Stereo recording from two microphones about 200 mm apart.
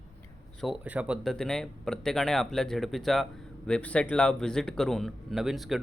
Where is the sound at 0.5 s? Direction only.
5° right (ahead or behind).